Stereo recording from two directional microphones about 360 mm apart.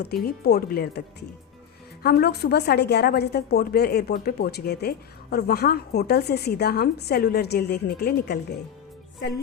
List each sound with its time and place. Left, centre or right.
0.3 s a woman's voice: left